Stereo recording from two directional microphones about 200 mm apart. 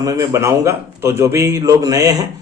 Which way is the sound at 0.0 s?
15° right (ahead or behind).